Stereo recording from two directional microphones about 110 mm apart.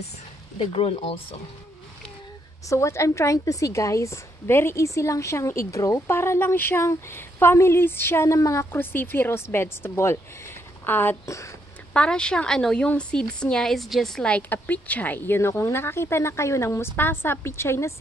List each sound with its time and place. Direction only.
0.6 s speech: 60° left (ahead or behind)
2.7 s a woman's voice: 25° left (ahead or behind)
11.9 s a woman's voice: 10° left (ahead or behind); by 17.9 s 25° left (ahead or behind)